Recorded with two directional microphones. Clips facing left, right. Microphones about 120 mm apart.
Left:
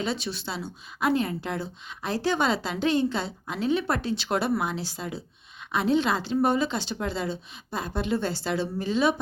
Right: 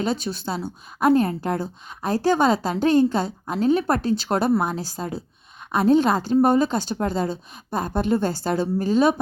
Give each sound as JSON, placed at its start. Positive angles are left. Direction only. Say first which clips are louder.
{"t": 0.0, "sound": "speech", "louder": "right 5 dB", "side_deg": -45}